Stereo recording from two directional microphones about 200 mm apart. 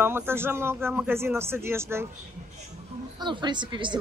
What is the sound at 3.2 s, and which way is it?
Speech, 20° right (ahead or behind).